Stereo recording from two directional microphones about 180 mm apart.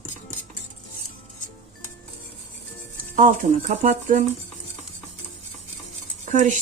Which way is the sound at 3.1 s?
45° right (ahead or behind).